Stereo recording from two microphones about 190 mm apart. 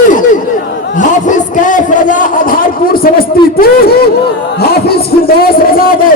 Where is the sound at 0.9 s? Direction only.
40° left (ahead or behind).